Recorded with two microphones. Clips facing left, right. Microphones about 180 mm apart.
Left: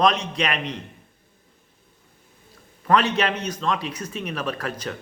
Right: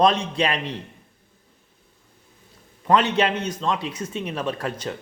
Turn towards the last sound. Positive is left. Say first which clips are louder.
# right 1 dB
turn(degrees=-25)  # may be behind; listen again after turning